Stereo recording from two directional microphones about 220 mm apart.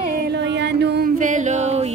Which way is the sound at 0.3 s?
50° right (ahead or behind).